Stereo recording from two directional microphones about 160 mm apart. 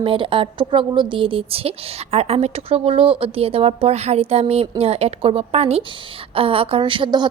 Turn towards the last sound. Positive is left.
turn(degrees=-30)  # may be behind; listen again after turning